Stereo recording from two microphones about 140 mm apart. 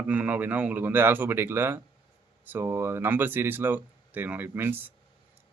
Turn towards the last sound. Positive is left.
turn(degrees=-15)  # may be behind; listen again after turning